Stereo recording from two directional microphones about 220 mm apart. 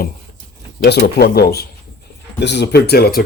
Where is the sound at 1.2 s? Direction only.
45° left (ahead or behind).